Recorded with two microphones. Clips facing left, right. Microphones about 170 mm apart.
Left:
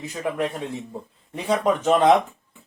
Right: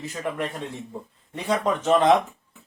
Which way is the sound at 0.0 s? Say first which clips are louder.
Left 3 dB; 10° left (ahead or behind).